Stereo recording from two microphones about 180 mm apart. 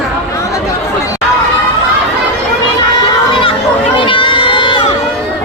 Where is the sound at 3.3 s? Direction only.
30° left (ahead or behind).